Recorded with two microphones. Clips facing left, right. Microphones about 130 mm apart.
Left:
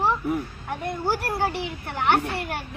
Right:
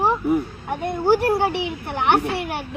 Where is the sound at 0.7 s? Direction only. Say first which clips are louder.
Right 8 dB; 30° right (ahead or behind).